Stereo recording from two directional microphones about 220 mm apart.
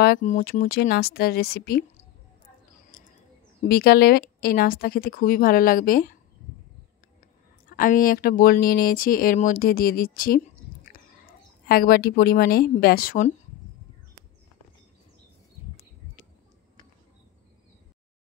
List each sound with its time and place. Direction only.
0.0 s speech: 40° left (ahead or behind)
2.9 s bird: 40° left (ahead or behind)
3.6 s speech: 45° left (ahead or behind)
7.7 s speech: 40° left (ahead or behind)